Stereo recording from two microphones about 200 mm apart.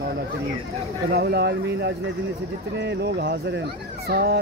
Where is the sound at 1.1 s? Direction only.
55° right (ahead or behind).